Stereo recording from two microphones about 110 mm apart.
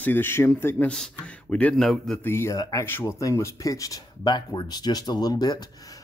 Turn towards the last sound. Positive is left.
turn(degrees=40)  # may be behind; listen again after turning